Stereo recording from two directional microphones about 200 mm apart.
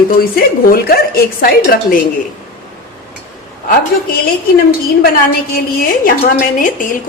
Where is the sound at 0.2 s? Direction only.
50° left (ahead or behind).